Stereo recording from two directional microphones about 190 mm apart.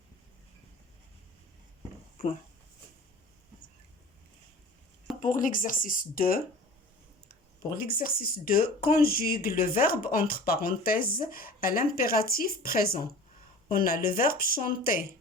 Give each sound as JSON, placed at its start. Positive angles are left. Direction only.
{"t": 5.2, "sound": "speech", "side_deg": 45}
{"t": 7.8, "sound": "speech", "side_deg": 50}